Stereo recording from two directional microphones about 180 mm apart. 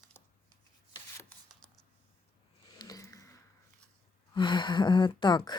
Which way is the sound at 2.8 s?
20° left (ahead or behind).